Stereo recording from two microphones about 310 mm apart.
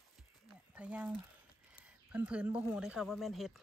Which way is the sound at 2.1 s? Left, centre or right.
Centre.